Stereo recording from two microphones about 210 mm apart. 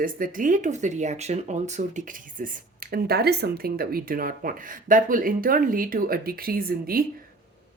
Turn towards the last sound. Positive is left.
turn(degrees=-45)  # may be behind; listen again after turning